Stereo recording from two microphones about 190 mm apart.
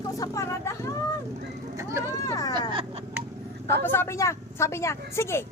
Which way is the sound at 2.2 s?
20° left (ahead or behind).